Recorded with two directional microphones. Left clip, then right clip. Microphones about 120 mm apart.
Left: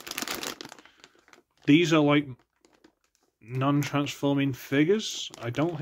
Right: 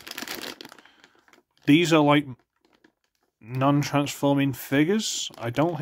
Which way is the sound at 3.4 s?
50° right (ahead or behind).